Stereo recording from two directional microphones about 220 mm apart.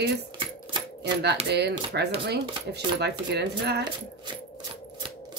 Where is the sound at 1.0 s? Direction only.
50° right (ahead or behind).